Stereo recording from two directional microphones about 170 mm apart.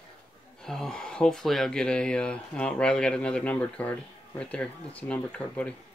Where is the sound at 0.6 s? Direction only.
5° left (ahead or behind).